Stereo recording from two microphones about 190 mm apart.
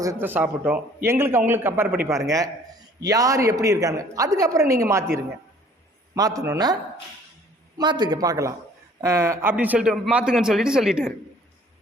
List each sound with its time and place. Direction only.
0.0 s a woman's voice: 15° right (ahead or behind)
7.8 s a man's voice: 20° right (ahead or behind); by 11.1 s 5° right (ahead or behind)